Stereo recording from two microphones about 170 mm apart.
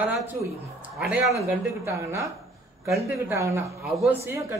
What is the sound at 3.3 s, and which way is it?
A man's voice, 15° right (ahead or behind).